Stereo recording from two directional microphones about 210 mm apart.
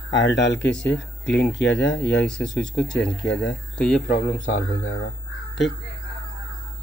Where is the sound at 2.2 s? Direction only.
5° left (ahead or behind).